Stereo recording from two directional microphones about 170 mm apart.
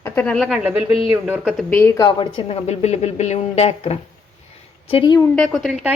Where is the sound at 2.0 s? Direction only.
30° left (ahead or behind).